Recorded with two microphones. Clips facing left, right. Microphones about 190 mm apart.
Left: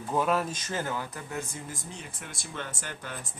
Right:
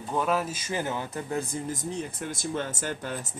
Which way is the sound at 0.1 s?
Centre (ahead or behind).